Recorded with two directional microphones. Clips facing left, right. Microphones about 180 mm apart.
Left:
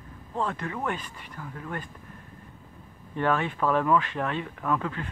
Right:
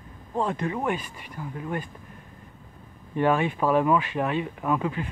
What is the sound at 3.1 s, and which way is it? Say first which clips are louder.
Speech: right 4 dB; 15° right (ahead or behind).